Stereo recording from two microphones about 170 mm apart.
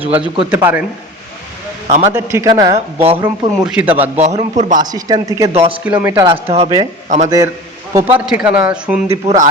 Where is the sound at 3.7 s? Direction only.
5° right (ahead or behind).